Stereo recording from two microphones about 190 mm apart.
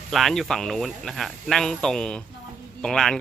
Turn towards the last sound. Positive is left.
turn(degrees=5)  # may be behind; listen again after turning